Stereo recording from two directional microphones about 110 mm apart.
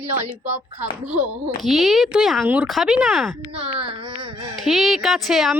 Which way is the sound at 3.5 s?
55° right (ahead or behind).